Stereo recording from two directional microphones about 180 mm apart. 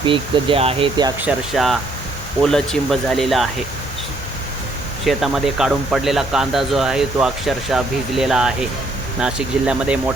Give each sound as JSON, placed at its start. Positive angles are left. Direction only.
{"t": 0.0, "sound": "speech", "side_deg": -30}
{"t": 1.2, "sound": "speech", "side_deg": 0}
{"t": 5.0, "sound": "speech", "side_deg": 0}